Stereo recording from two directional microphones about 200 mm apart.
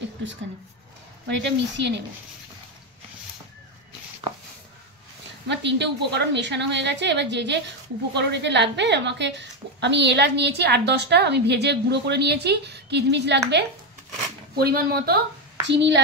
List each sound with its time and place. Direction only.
0.0 s a sound: 65° right (ahead or behind)
1.2 s a woman's voice: 60° right (ahead or behind)
5.5 s a woman's voice: 60° right (ahead or behind)
14.6 s speech: 50° right (ahead or behind)
15.6 s a child's voice: 60° right (ahead or behind)